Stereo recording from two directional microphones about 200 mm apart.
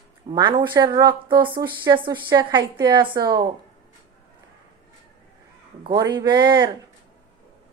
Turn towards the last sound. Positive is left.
turn(degrees=-20)  # may be behind; listen again after turning